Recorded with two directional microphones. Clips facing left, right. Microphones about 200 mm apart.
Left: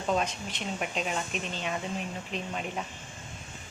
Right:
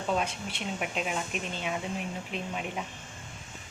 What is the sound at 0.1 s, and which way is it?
Speech, 5° right (ahead or behind).